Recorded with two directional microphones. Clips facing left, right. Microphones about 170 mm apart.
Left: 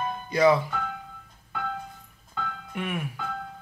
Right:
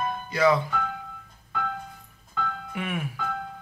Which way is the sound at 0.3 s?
15° left (ahead or behind).